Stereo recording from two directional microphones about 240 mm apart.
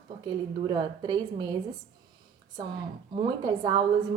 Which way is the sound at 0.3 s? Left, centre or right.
Centre.